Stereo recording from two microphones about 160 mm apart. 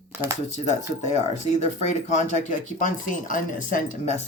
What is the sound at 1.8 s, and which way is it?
Speech, 45° left (ahead or behind).